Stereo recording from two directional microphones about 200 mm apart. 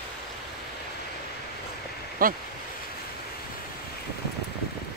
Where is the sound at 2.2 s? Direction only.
45° right (ahead or behind).